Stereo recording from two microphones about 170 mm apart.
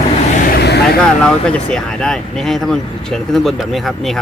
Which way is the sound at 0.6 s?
75° left (ahead or behind).